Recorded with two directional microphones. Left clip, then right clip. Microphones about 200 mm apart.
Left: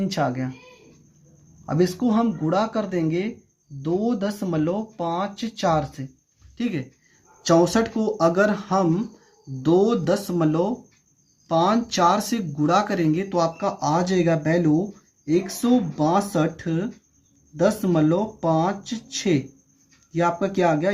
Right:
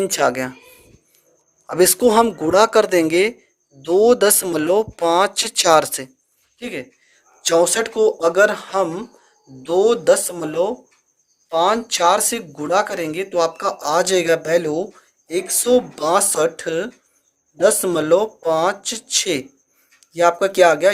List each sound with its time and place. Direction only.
0.0 s speech: 40° right (ahead or behind)
1.8 s speech: 40° right (ahead or behind)
7.4 s speech: 25° right (ahead or behind)